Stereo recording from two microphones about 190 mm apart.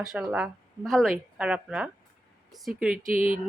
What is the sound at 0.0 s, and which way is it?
Speech, centre (ahead or behind).